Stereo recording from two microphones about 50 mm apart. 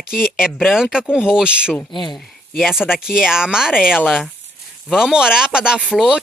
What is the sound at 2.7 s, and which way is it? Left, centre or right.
Speech, centre.